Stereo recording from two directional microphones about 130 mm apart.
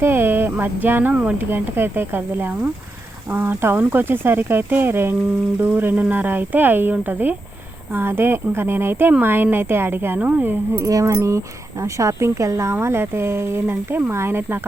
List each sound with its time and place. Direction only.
0.0 s speech: 20° right (ahead or behind)
10.8 s speech: 25° right (ahead or behind)